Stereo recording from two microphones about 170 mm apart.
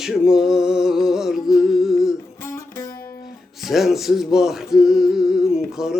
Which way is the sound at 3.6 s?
Centre (ahead or behind).